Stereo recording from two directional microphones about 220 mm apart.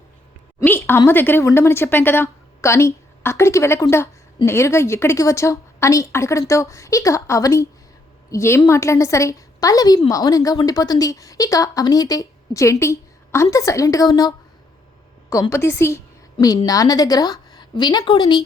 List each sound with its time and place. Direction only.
0.6 s a woman's voice: 10° left (ahead or behind)